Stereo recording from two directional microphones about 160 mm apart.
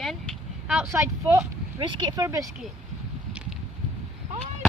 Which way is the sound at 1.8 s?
30° right (ahead or behind).